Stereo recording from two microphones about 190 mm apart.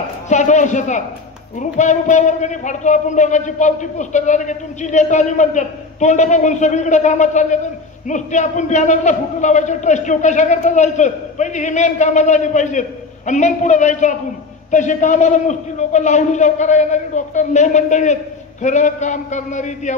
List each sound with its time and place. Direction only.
0.3 s a man's voice: 40° left (ahead or behind)